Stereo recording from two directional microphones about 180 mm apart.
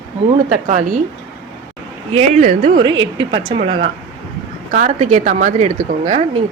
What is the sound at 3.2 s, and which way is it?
Speech, 30° right (ahead or behind).